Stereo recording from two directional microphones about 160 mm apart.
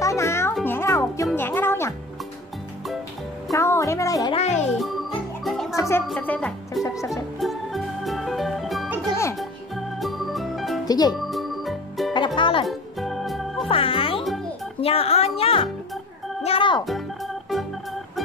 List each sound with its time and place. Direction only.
0.0 s music: 20° left (ahead or behind)
3.5 s music: 15° left (ahead or behind)
4.4 s music: 45° left (ahead or behind)
4.7 s music: centre (ahead or behind)
5.8 s music: 15° left (ahead or behind)
6.1 s speech: 10° left (ahead or behind)
7.1 s organ: centre (ahead or behind)
9.4 s music: centre (ahead or behind)
10.9 s speech: 25° left (ahead or behind)
11.1 s music: centre (ahead or behind)
12.4 s music: 30° left (ahead or behind)
12.6 s music: centre (ahead or behind)
13.7 s music: 35° left (ahead or behind)